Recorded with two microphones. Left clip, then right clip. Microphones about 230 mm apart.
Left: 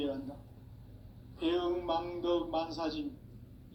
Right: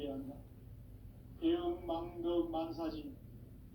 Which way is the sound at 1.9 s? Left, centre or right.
Left.